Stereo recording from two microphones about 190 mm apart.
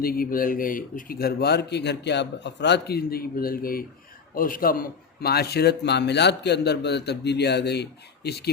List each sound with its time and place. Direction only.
0.0 s a man's voice: 50° left (ahead or behind)